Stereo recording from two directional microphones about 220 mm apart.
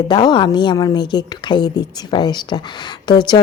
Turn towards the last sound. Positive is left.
turn(degrees=20)  # may be behind; listen again after turning